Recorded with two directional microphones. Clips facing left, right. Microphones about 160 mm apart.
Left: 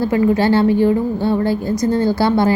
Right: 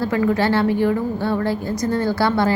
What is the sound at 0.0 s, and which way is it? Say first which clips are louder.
A woman's voice: left 4 dB; 25° left (ahead or behind).